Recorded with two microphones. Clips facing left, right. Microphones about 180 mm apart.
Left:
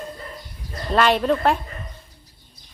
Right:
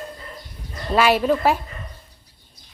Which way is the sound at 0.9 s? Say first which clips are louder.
Right 1 dB; 5° right (ahead or behind).